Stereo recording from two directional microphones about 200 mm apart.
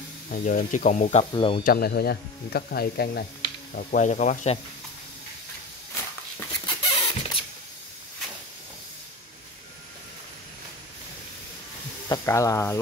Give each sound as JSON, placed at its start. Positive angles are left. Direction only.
{"t": 0.3, "sound": "speech", "side_deg": 40}
{"t": 1.3, "sound": "speech", "side_deg": 25}
{"t": 1.6, "sound": "speech", "side_deg": 50}
{"t": 3.7, "sound": "speech", "side_deg": 40}
{"t": 6.6, "sound": "rodents", "side_deg": 25}
{"t": 12.1, "sound": "speech", "side_deg": 15}